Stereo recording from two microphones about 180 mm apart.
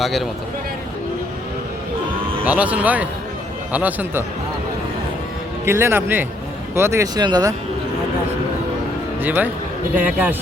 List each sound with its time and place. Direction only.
0.0 s speech: centre (ahead or behind)
2.4 s speech: 10° right (ahead or behind)
5.6 s speech: 15° right (ahead or behind)
9.2 s speech: 10° right (ahead or behind)